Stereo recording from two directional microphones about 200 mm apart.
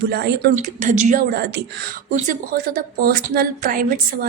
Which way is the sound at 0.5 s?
40° right (ahead or behind).